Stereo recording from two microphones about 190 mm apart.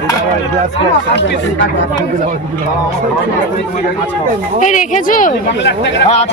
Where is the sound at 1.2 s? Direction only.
65° left (ahead or behind).